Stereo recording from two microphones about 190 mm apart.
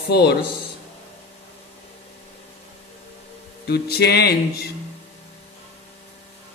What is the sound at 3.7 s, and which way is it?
Music, 55° left (ahead or behind).